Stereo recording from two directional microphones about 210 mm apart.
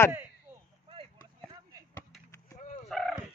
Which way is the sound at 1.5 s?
15° right (ahead or behind).